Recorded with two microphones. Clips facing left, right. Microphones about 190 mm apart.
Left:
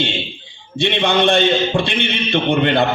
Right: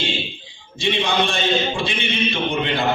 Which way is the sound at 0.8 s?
65° left (ahead or behind).